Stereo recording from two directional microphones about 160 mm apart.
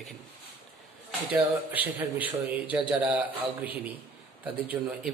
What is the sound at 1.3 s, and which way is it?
A man's voice, 10° right (ahead or behind).